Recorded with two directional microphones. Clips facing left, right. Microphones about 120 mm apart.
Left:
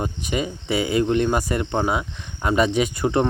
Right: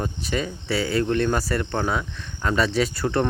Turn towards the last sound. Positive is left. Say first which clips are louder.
# left 2 dB
turn(degrees=15)  # may be behind; listen again after turning